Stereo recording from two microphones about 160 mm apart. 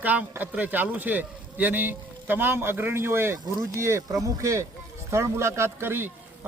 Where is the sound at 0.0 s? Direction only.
10° right (ahead or behind).